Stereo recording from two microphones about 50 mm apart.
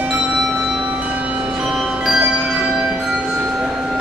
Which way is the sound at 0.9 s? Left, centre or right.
Right.